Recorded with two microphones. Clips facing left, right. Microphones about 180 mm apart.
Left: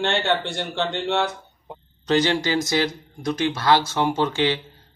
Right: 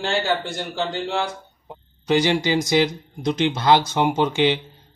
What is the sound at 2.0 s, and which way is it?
Speech, 10° right (ahead or behind).